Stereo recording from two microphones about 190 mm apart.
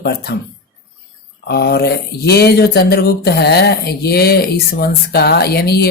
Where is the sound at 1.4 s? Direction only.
60° left (ahead or behind).